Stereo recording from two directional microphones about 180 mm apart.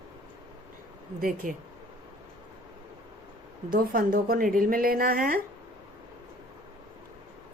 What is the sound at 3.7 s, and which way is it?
A woman's voice, 50° right (ahead or behind).